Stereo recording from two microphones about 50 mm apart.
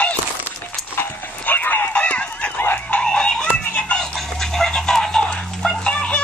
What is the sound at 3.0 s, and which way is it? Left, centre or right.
Music, centre.